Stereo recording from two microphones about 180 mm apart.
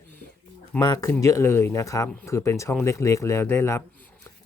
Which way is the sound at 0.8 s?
20° left (ahead or behind).